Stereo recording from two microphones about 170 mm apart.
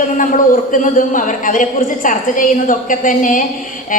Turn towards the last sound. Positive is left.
turn(degrees=50)  # may be behind; listen again after turning